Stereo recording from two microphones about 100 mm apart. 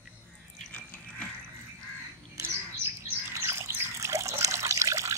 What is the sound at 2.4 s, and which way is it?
Water, 25° right (ahead or behind).